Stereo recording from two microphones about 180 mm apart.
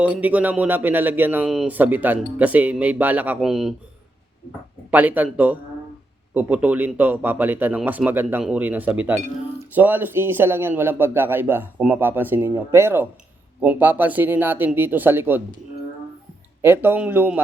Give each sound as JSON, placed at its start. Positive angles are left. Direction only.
{"t": 0.0, "sound": "a man's voice", "side_deg": -10}
{"t": 4.9, "sound": "a man's voice", "side_deg": -10}
{"t": 16.6, "sound": "a man's voice", "side_deg": -10}